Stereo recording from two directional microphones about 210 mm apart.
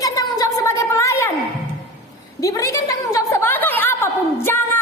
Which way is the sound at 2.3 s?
15° left (ahead or behind).